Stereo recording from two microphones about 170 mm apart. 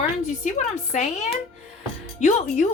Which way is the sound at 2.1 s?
45° left (ahead or behind).